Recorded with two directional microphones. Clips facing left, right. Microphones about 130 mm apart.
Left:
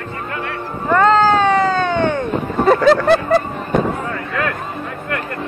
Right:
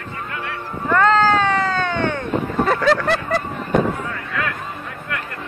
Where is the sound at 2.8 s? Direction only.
25° left (ahead or behind).